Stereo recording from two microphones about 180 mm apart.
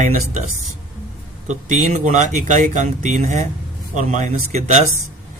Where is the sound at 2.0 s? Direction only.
40° right (ahead or behind).